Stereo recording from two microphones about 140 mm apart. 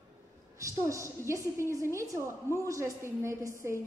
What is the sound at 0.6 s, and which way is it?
A woman's voice, 20° right (ahead or behind).